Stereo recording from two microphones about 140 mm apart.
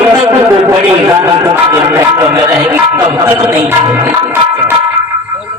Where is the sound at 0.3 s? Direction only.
15° right (ahead or behind).